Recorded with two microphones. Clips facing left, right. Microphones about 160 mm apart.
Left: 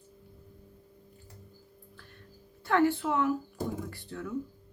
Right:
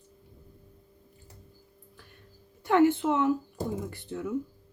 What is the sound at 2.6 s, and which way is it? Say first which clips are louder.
A woman's voice: right 4 dB; 20° right (ahead or behind).